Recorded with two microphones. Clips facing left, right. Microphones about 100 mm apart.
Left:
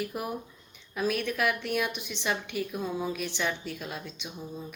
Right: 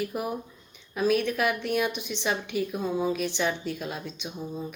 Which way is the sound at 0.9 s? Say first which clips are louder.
Right 4 dB; 20° right (ahead or behind).